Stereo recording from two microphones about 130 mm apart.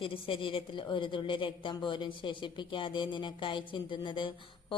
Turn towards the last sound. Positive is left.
turn(degrees=40)  # may be behind; listen again after turning